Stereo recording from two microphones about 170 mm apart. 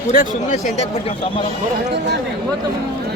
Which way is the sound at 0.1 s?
45° left (ahead or behind).